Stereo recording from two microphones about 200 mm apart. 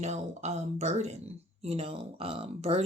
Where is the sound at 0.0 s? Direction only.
35° right (ahead or behind).